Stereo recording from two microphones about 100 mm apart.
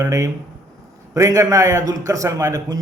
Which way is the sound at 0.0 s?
30° right (ahead or behind).